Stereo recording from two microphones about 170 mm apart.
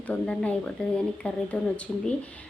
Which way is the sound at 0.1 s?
10° left (ahead or behind).